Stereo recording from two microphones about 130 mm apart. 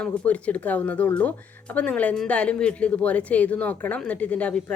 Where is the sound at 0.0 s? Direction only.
10° left (ahead or behind).